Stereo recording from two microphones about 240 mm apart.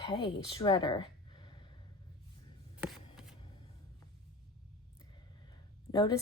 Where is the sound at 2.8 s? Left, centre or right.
Centre.